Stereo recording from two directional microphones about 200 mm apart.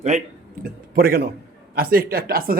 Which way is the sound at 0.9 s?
50° right (ahead or behind).